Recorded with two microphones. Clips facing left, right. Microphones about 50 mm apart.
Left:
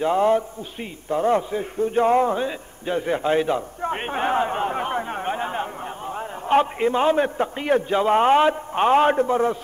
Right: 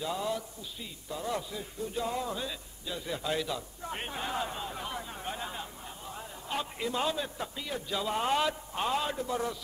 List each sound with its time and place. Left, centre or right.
0.0 s a man's voice: left